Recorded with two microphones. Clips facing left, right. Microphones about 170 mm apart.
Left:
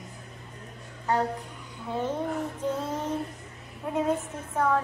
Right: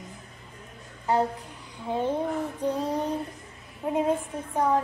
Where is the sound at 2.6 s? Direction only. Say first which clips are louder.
Right 5 dB; 35° right (ahead or behind).